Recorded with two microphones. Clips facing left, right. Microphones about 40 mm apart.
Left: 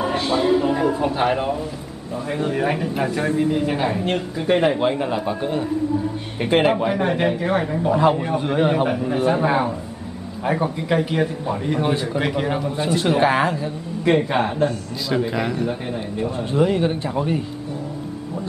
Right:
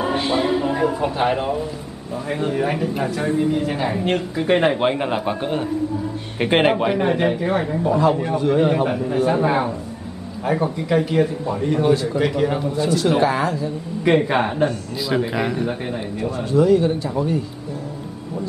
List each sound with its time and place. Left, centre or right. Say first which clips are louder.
0.0 s music: even; centre
1.3 s a man's voice: even; centre
3.0 s speech: left 1 dB; left
3.3 s speech: even; centre
4.0 s a man's voice: right 2 dB; centre; by 6.7 s right
7.2 s speech: even; centre
8.4 s speech: right 2 dB; centre
12.7 s speech: even; left
14.0 s a man's voice: right 1 dB; centre
16.5 s speech: right 4 dB; left